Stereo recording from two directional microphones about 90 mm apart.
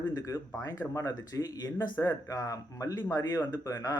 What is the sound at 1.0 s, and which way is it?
Speech, 45° left (ahead or behind).